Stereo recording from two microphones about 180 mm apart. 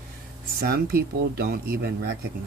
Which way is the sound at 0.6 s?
55° right (ahead or behind).